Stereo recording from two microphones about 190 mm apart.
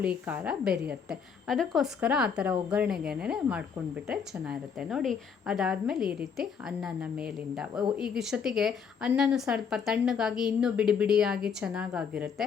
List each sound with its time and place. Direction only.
0.0 s a woman's voice: 5° right (ahead or behind)